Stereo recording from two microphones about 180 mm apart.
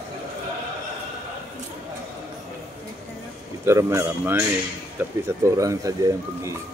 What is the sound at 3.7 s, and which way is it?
Speech, 15° right (ahead or behind).